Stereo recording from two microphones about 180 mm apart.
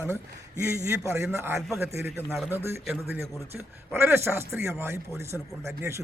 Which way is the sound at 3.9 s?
15° right (ahead or behind).